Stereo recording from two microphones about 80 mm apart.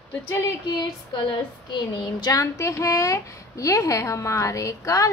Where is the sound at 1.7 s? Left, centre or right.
Left.